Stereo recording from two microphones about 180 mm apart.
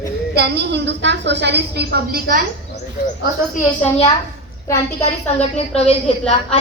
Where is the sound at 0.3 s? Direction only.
70° right (ahead or behind).